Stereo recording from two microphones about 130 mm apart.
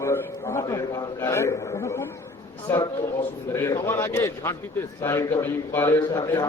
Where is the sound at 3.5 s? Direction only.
20° left (ahead or behind).